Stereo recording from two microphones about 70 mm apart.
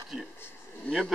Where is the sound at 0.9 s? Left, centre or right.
Centre.